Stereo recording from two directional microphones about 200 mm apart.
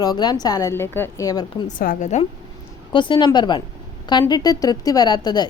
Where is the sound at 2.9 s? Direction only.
25° left (ahead or behind).